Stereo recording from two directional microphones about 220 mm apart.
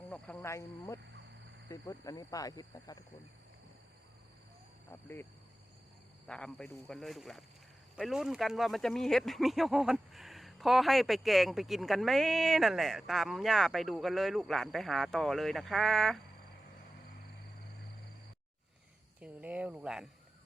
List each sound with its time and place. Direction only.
0.1 s speech: 5° left (ahead or behind)
4.9 s speech: 10° left (ahead or behind)
6.2 s speech: 5° left (ahead or behind)
19.2 s speech: 5° right (ahead or behind)